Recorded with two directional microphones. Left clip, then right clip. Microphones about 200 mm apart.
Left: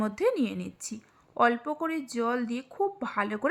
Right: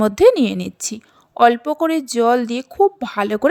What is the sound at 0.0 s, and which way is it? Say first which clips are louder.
A woman's voice: right 15 dB; 40° right (ahead or behind).